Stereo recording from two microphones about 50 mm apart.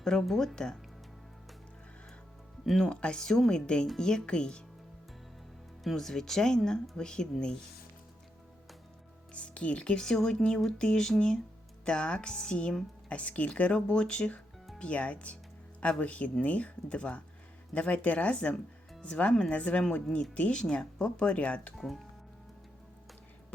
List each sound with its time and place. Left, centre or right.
0.0 s speech: centre
2.6 s speech: centre
2.9 s speech: centre
5.8 s speech: centre
9.3 s speech: left
21.8 s speech: centre